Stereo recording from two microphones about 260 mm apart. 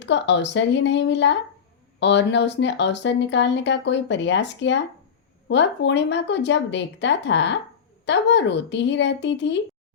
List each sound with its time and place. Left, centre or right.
0.0 s speech: left